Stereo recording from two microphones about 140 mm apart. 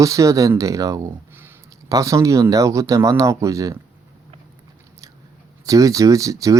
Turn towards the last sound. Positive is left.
turn(degrees=-25)  # may be behind; listen again after turning